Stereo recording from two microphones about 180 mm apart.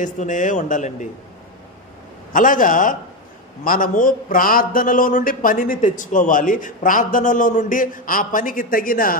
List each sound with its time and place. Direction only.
0.0 s a man's voice: 45° left (ahead or behind)
2.3 s a man's voice: 45° left (ahead or behind)